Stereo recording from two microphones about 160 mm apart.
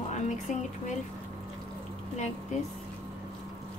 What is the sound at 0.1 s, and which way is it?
Speech, 50° left (ahead or behind).